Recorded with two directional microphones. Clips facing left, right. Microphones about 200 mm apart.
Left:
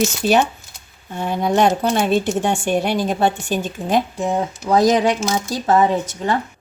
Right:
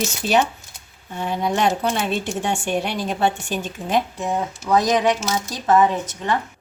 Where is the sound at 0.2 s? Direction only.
45° left (ahead or behind).